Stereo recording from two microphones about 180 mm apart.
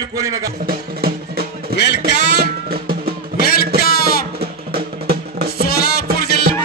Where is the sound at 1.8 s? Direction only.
70° left (ahead or behind).